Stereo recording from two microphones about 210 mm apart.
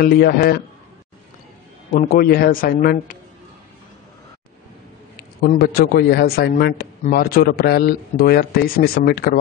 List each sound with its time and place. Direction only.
0.0 s speech: 45° left (ahead or behind)
2.0 s speech: 45° left (ahead or behind)
5.4 s speech: 45° left (ahead or behind)